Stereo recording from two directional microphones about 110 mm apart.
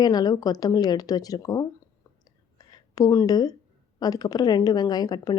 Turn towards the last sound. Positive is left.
turn(degrees=35)  # may be behind; listen again after turning